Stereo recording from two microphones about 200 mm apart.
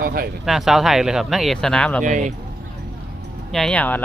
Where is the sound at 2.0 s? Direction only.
40° right (ahead or behind).